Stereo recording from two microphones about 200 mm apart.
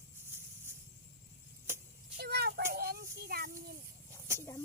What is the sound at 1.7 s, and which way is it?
Vehicle, 15° right (ahead or behind).